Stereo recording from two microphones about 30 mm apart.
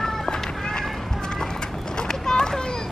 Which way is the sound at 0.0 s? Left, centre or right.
Centre.